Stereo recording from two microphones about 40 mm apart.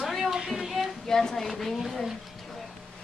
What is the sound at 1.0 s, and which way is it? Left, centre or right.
A woman's voice, centre.